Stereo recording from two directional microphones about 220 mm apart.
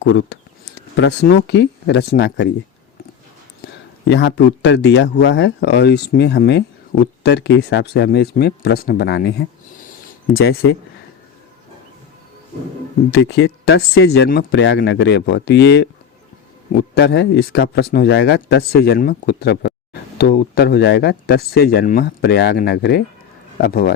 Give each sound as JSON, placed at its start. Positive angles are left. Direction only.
{"t": 0.0, "sound": "speech", "side_deg": 55}
{"t": 4.1, "sound": "speech", "side_deg": 50}
{"t": 13.1, "sound": "speech", "side_deg": 50}